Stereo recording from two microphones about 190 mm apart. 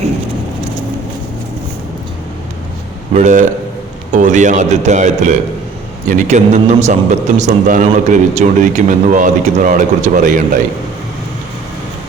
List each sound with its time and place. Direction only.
3.1 s a man's voice: 40° right (ahead or behind)